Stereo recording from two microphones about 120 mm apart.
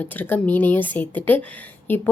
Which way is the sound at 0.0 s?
15° left (ahead or behind).